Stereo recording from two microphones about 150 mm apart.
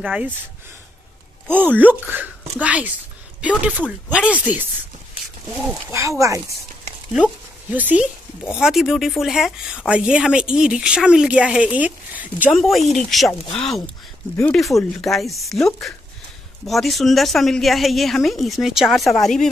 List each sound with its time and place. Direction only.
0.0 s speech: 10° right (ahead or behind)
1.5 s speech: 10° right (ahead or behind)
7.7 s speech: 10° right (ahead or behind)
12.5 s speech: centre (ahead or behind)